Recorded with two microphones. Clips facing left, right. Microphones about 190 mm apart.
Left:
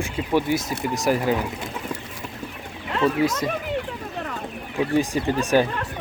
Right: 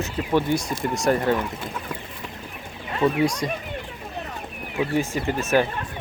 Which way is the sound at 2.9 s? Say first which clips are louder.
Even; 75° left (ahead or behind).